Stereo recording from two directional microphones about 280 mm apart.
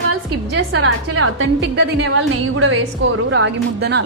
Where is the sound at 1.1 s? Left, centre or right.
Right.